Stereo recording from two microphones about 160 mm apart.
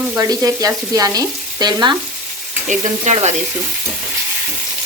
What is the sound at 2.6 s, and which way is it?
Frying, 50° right (ahead or behind).